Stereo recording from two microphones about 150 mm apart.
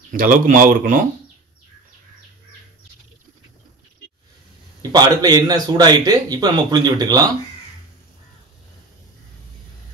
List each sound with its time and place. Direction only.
0.1 s speech: 65° right (ahead or behind)
4.9 s speech: 25° right (ahead or behind)